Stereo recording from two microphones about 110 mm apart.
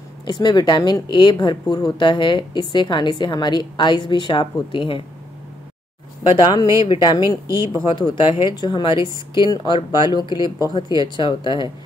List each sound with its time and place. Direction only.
0.2 s a woman's voice: 40° left (ahead or behind)
6.3 s a woman's voice: 40° left (ahead or behind)